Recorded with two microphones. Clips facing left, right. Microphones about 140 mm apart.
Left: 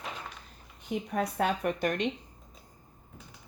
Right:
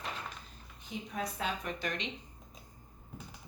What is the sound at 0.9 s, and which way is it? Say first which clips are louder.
Speech: left 7 dB; 60° left (ahead or behind).